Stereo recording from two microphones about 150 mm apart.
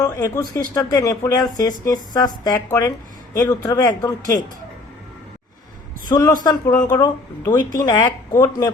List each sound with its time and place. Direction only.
0.0 s speech: 20° left (ahead or behind)
6.1 s speech: 30° left (ahead or behind)
6.9 s speech: 15° left (ahead or behind)
7.5 s speech: 25° left (ahead or behind)